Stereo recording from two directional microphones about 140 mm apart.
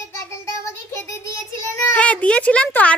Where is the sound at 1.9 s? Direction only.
10° left (ahead or behind).